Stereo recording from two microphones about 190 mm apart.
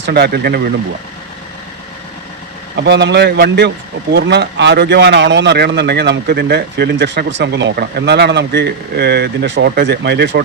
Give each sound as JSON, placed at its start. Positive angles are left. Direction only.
{"t": 0.0, "sound": "a man's voice", "side_deg": -60}
{"t": 2.7, "sound": "a man's voice", "side_deg": -65}